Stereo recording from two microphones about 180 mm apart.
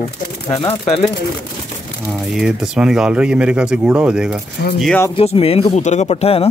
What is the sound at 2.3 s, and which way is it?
Speech, centre (ahead or behind).